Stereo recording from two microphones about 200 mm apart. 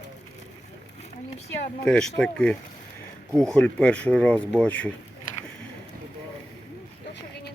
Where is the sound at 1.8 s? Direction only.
5° left (ahead or behind).